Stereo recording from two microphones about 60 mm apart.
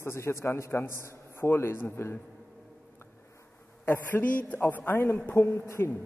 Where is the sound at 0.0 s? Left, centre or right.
Left.